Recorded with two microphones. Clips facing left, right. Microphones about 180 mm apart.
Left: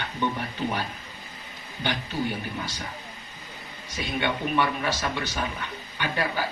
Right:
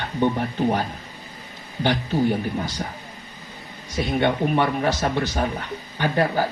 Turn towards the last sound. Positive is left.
turn(degrees=-40)  # may be behind; listen again after turning